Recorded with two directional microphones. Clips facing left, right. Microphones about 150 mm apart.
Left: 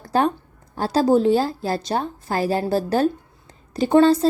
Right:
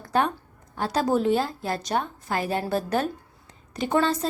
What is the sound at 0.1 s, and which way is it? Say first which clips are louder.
A woman's voice: left 4 dB; 30° left (ahead or behind).